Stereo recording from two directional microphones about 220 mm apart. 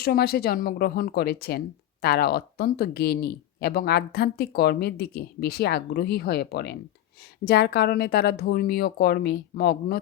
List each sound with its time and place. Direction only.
0.0 s speech: 45° left (ahead or behind)